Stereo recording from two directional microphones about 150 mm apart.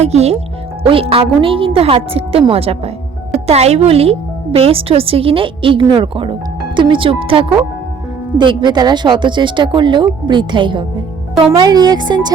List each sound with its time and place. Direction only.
0.0 s a woman's voice: 45° right (ahead or behind); by 12.3 s 30° right (ahead or behind)